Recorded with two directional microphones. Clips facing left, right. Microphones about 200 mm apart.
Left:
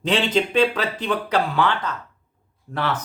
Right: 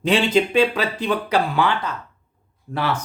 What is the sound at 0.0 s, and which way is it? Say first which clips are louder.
Speech: right 3 dB; 10° right (ahead or behind).